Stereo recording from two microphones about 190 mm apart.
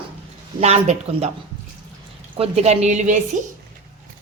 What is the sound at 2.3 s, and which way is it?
Speech, 30° right (ahead or behind).